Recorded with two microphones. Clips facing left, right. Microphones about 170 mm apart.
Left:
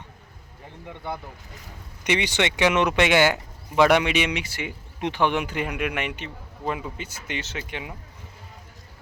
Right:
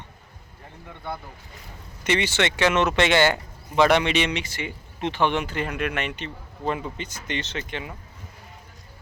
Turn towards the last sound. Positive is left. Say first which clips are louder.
# right 1 dB
turn(degrees=10)  # may be behind; listen again after turning